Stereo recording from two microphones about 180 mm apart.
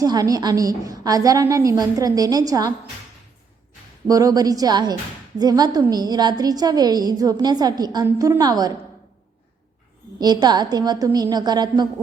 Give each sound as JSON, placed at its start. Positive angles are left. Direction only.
{"t": 0.0, "sound": "a woman's voice", "side_deg": -20}
{"t": 4.0, "sound": "a woman's voice", "side_deg": -20}
{"t": 10.2, "sound": "a woman's voice", "side_deg": -20}